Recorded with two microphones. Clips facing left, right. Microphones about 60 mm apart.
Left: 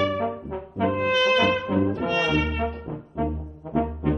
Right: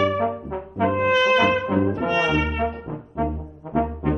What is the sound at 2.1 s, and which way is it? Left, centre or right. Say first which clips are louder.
Brass instrument: right 3 dB; centre.